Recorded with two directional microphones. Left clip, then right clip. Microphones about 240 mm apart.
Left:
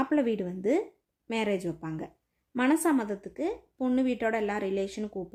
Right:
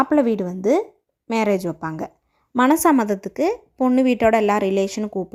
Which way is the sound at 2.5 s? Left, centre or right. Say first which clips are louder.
Right 10 dB; right.